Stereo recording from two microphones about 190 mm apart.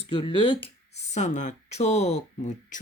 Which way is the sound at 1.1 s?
40° left (ahead or behind).